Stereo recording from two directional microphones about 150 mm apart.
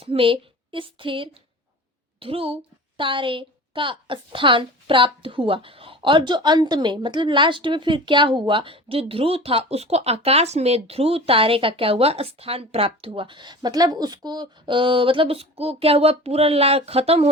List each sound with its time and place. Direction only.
0.0 s a woman's voice: 35° right (ahead or behind)